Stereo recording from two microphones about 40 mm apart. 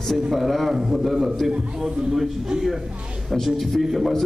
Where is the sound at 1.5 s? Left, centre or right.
Right.